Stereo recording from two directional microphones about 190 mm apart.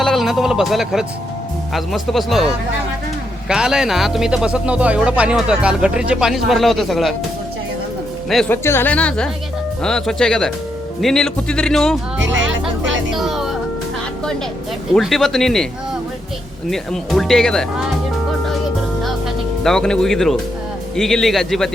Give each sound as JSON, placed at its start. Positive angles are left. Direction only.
{"t": 0.0, "sound": "speech", "side_deg": 0}
{"t": 3.5, "sound": "speech", "side_deg": -5}
{"t": 8.3, "sound": "speech", "side_deg": 0}
{"t": 8.6, "sound": "a woman's voice", "side_deg": 10}
{"t": 12.2, "sound": "music", "side_deg": -75}
{"t": 13.1, "sound": "music", "side_deg": 0}
{"t": 14.9, "sound": "speech", "side_deg": 0}
{"t": 16.6, "sound": "speech", "side_deg": 0}
{"t": 19.6, "sound": "speech", "side_deg": 5}